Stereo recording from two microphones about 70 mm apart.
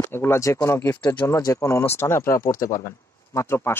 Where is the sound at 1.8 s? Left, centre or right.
Left.